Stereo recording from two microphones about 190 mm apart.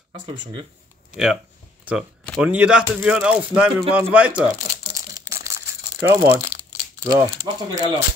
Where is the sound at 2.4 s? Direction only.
5° right (ahead or behind).